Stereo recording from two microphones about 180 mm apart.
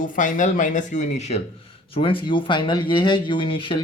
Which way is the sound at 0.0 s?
45° left (ahead or behind).